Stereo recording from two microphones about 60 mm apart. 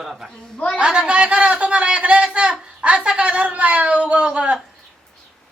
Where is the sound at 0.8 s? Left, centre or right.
Centre.